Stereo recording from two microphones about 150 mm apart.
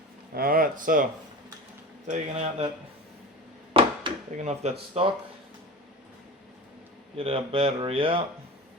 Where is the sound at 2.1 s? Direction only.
50° right (ahead or behind).